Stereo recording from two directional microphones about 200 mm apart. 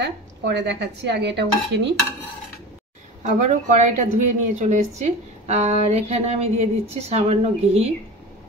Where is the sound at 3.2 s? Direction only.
35° right (ahead or behind).